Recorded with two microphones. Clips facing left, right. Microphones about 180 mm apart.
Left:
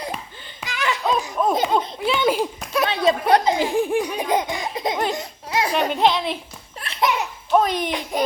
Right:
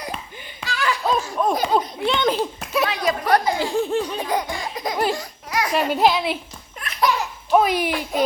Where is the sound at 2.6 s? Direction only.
Centre (ahead or behind).